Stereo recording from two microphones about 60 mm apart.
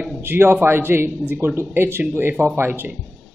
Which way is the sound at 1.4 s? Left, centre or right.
Right.